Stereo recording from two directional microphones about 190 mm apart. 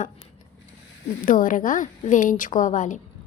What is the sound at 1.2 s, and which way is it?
A woman's voice, 45° left (ahead or behind).